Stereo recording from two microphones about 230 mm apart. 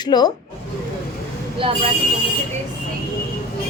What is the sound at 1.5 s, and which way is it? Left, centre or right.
Speech, right.